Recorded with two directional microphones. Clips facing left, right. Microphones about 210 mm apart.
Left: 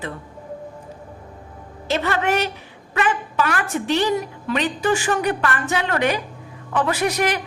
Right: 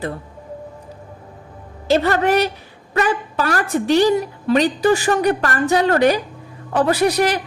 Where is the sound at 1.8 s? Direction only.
35° right (ahead or behind).